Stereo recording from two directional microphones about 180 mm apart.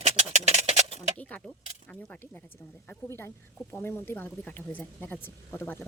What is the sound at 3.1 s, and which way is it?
Speech, 10° left (ahead or behind).